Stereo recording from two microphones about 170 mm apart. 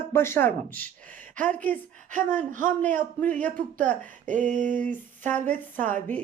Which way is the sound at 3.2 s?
10° left (ahead or behind).